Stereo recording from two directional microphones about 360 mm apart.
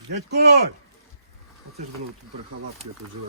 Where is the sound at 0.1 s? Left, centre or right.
Right.